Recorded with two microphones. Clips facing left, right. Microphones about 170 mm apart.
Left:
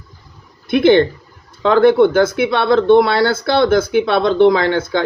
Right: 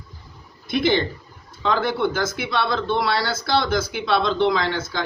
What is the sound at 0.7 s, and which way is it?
Speech, 55° left (ahead or behind).